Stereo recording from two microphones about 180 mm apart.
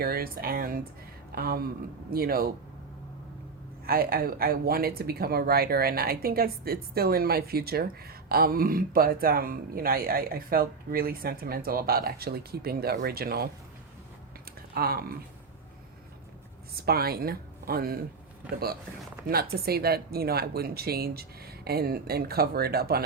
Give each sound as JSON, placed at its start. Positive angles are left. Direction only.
{"t": 0.0, "sound": "speech", "side_deg": -55}
{"t": 3.8, "sound": "speech", "side_deg": -55}
{"t": 14.8, "sound": "speech", "side_deg": -60}
{"t": 16.7, "sound": "speech", "side_deg": -60}
{"t": 19.3, "sound": "speech", "side_deg": -60}